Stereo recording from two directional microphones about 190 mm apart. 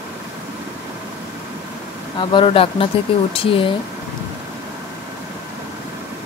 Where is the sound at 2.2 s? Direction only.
25° left (ahead or behind).